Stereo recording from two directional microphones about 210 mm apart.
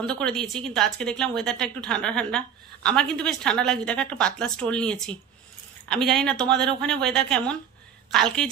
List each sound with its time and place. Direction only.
0.0 s a woman's voice: 5° left (ahead or behind)